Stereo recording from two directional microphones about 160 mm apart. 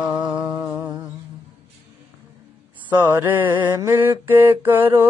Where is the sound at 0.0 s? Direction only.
5° right (ahead or behind).